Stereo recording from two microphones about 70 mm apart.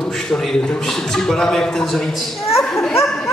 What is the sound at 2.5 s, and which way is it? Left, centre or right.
Children playing, left.